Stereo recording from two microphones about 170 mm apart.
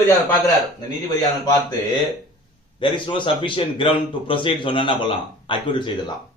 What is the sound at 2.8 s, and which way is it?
A man's voice, 30° left (ahead or behind).